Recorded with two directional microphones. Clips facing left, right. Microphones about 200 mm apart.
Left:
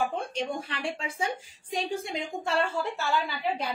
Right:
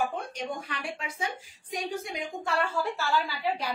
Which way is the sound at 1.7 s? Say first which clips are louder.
Left 2 dB; 25° left (ahead or behind).